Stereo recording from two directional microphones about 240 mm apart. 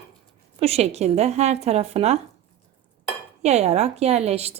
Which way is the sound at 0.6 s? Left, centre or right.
Right.